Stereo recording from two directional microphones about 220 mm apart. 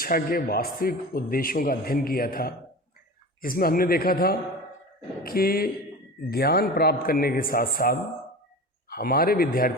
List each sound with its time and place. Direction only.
0.0 s a man's voice: 40° left (ahead or behind)